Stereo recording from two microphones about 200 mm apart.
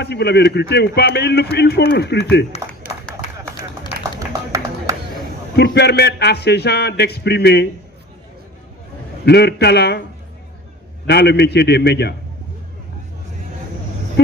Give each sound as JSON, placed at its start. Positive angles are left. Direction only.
{"t": 0.0, "sound": "speech", "side_deg": 55}
{"t": 4.3, "sound": "a sound", "side_deg": -15}
{"t": 5.6, "sound": "speech", "side_deg": 55}
{"t": 9.2, "sound": "speech", "side_deg": 55}
{"t": 11.1, "sound": "speech", "side_deg": 55}